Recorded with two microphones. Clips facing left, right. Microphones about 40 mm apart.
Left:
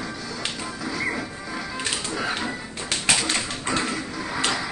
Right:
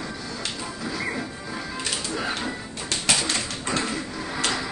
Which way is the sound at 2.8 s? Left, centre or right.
Left.